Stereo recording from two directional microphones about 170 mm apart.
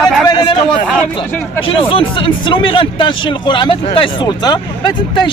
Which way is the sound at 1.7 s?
30° left (ahead or behind).